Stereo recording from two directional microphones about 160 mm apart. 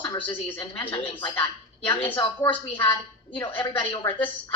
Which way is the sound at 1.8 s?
10° left (ahead or behind).